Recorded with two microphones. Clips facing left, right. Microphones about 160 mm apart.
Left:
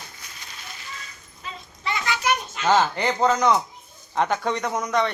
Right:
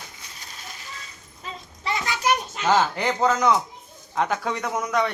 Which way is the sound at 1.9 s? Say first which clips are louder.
Even; 35° right (ahead or behind).